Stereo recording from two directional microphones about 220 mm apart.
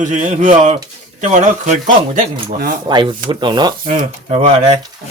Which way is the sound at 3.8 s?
35° right (ahead or behind).